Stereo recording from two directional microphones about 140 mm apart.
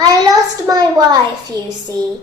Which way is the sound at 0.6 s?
30° right (ahead or behind).